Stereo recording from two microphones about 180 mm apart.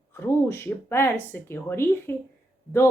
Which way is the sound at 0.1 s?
15° left (ahead or behind).